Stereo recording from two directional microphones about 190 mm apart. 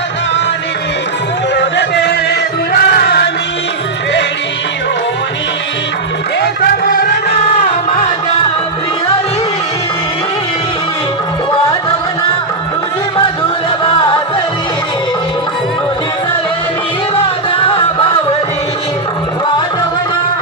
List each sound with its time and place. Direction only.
1.5 s a sound: 65° left (ahead or behind)
2.7 s music: 55° left (ahead or behind)
6.4 s music: 55° left (ahead or behind)